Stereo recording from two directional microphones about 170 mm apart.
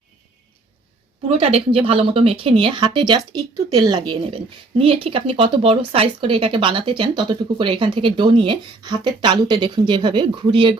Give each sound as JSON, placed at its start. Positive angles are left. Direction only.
{"t": 1.3, "sound": "speech", "side_deg": -35}